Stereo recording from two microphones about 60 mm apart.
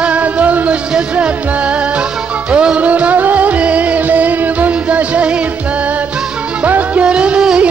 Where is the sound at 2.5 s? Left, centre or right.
Centre.